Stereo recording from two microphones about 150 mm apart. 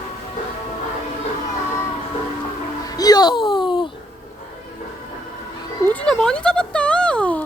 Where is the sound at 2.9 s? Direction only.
25° left (ahead or behind).